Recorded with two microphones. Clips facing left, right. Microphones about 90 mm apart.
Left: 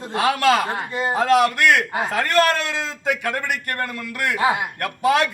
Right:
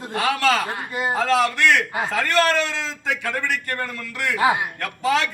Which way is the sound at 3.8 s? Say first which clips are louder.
Left 2 dB; 50° left (ahead or behind).